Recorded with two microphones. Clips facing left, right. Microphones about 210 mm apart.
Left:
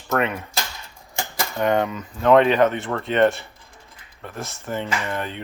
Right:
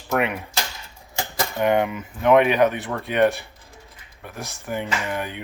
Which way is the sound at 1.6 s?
15° right (ahead or behind).